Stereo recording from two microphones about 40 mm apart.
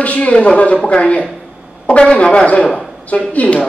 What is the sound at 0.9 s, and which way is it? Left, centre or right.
Speech, left.